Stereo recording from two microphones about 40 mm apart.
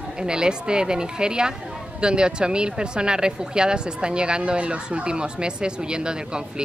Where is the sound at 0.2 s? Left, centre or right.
Right.